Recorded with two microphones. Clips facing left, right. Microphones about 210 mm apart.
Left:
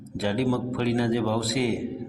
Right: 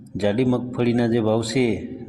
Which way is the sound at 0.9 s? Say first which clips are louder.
Right 6 dB; 15° right (ahead or behind).